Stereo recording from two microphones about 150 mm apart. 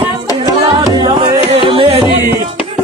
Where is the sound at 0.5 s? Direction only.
25° right (ahead or behind).